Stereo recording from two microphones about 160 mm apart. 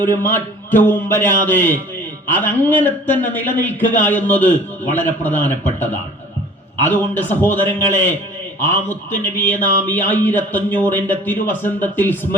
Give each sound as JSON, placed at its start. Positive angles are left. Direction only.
{"t": 0.0, "sound": "speech", "side_deg": 10}